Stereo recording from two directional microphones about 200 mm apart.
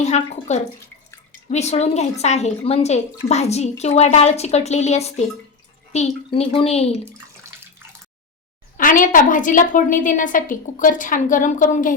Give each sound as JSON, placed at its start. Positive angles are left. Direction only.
{"t": 0.0, "sound": "a woman's voice", "side_deg": 35}
{"t": 8.8, "sound": "a woman's voice", "side_deg": 45}